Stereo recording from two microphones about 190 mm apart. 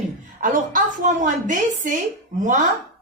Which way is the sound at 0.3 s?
45° right (ahead or behind).